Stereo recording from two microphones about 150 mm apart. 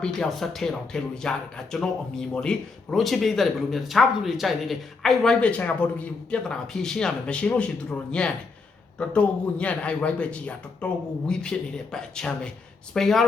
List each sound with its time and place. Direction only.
0.0 s a man's voice: 5° left (ahead or behind)